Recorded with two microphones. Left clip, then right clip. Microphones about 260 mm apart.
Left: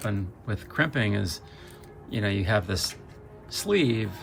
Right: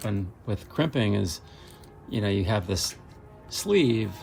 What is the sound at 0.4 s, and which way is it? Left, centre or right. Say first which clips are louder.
Speech: left 2 dB; centre.